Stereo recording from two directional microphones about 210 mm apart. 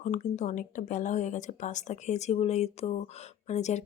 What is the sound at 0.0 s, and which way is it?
Speech, 35° left (ahead or behind).